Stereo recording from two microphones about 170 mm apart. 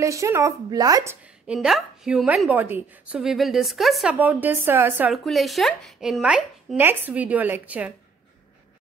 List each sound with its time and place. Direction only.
0.0 s speech: 20° right (ahead or behind)
1.5 s a woman's voice: 5° right (ahead or behind)
5.1 s a woman's voice: centre (ahead or behind)